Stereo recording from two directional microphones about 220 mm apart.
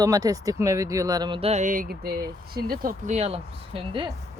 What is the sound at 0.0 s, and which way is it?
Speech, 15° right (ahead or behind).